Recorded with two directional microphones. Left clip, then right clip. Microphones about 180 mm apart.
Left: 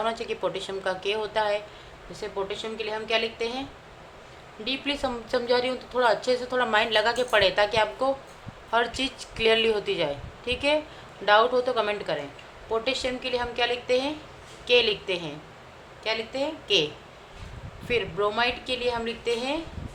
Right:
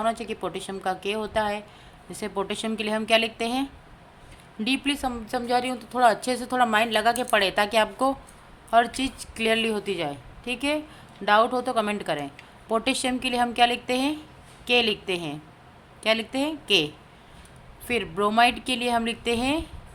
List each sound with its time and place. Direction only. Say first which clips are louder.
0.0 s a woman's voice: even; 35° right (ahead or behind)
2.1 s a woman's voice: right 2 dB; 45° right (ahead or behind)
17.8 s a woman's voice: right 1 dB; 40° right (ahead or behind)